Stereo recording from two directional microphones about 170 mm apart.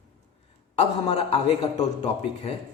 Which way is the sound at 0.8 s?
40° left (ahead or behind).